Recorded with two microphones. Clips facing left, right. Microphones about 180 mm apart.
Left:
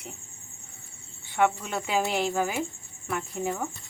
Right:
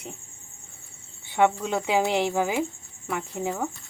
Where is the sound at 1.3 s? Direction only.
15° right (ahead or behind).